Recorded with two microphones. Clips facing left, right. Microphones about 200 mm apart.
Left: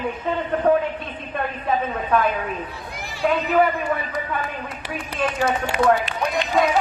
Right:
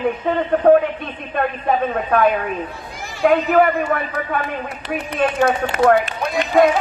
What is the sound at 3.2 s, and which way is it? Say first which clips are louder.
Speech: right 5 dB; 70° right (ahead or behind).